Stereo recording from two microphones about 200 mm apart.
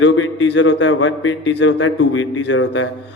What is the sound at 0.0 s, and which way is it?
A man's voice, 70° left (ahead or behind).